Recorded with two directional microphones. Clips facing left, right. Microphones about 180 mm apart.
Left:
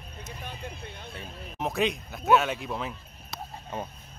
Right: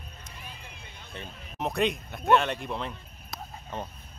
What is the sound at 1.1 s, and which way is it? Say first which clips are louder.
Speech: left 1 dB; 5° left (ahead or behind).